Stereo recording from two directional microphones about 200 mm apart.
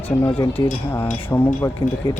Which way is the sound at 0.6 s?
20° left (ahead or behind).